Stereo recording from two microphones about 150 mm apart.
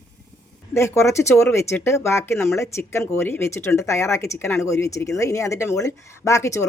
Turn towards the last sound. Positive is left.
turn(degrees=20)  # may be behind; listen again after turning